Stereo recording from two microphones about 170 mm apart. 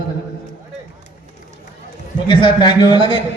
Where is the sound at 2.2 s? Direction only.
30° left (ahead or behind).